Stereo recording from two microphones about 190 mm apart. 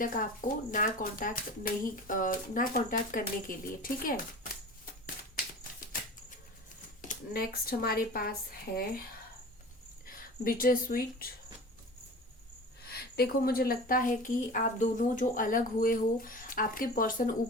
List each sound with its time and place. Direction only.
0.0 s a woman's voice: 45° left (ahead or behind)
7.1 s a woman's voice: 50° left (ahead or behind)
10.1 s speech: 50° left (ahead or behind)
12.8 s a woman's voice: 55° left (ahead or behind)